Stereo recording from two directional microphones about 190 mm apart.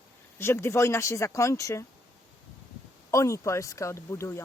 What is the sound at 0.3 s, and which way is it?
Speech, 15° left (ahead or behind).